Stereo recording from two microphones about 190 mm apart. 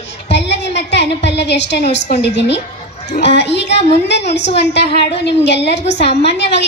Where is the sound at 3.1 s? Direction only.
60° left (ahead or behind).